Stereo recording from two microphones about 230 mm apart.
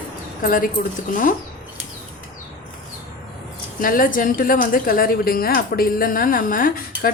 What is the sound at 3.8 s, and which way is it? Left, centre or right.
A woman's voice, left.